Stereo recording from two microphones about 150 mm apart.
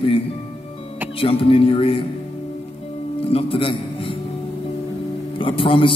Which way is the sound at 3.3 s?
35° left (ahead or behind).